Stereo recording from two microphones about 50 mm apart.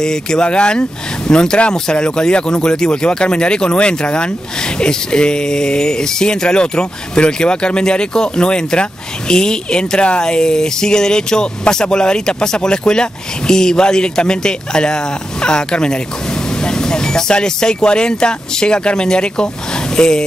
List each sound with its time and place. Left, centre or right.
0.0 s speech: centre